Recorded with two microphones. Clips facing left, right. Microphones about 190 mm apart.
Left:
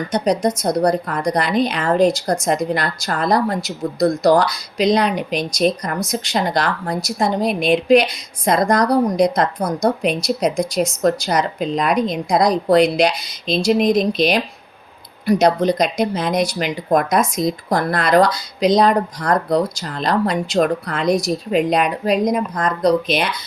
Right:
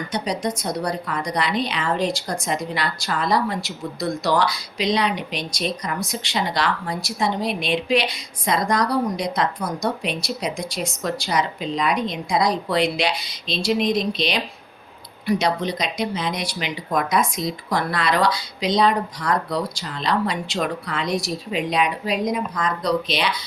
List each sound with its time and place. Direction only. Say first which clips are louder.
0.1 s a woman's voice: left 8 dB; 45° left (ahead or behind)